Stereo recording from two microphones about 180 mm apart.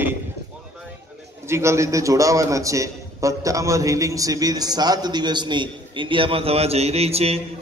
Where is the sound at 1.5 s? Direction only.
15° right (ahead or behind).